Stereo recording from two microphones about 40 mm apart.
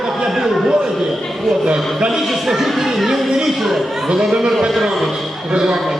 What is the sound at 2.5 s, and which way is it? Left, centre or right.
Speech, centre.